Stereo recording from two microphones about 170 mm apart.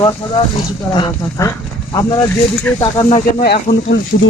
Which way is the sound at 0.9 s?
20° left (ahead or behind).